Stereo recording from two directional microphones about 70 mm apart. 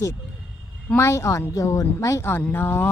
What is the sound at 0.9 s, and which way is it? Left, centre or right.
Speech, left.